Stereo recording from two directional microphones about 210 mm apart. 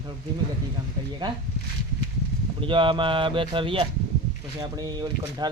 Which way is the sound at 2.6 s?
25° right (ahead or behind).